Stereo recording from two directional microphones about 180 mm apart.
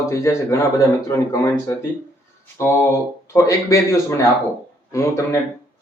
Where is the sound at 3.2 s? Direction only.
15° left (ahead or behind).